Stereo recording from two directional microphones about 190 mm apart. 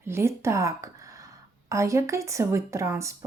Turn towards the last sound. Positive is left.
turn(degrees=-15)  # may be behind; listen again after turning